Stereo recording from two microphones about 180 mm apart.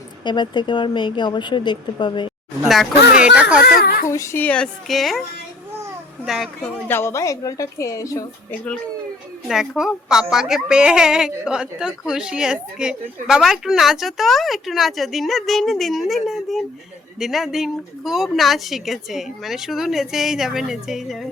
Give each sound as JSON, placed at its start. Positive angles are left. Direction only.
{"t": 0.3, "sound": "a woman's voice", "side_deg": 25}
{"t": 2.6, "sound": "a woman's voice", "side_deg": -5}
{"t": 3.7, "sound": "a child's voice", "side_deg": 55}
{"t": 4.1, "sound": "a woman's voice", "side_deg": 15}
{"t": 6.2, "sound": "a woman's voice", "side_deg": 0}
{"t": 6.8, "sound": "a woman's voice", "side_deg": 15}
{"t": 9.5, "sound": "a woman's voice", "side_deg": -5}